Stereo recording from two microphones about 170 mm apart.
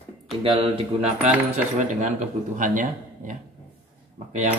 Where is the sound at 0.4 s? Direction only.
30° right (ahead or behind).